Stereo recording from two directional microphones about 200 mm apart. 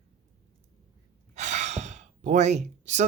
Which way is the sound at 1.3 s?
35° right (ahead or behind).